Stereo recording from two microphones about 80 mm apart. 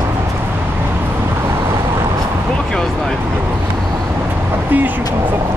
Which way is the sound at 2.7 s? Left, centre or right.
Centre.